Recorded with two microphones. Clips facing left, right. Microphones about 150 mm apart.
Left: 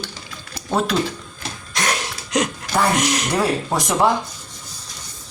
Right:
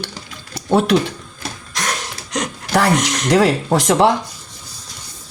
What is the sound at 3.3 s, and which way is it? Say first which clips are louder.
Speech: right 9 dB; 80° right.